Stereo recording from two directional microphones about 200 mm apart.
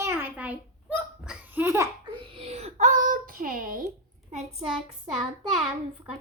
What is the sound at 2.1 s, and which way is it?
A child's voice, 25° right (ahead or behind).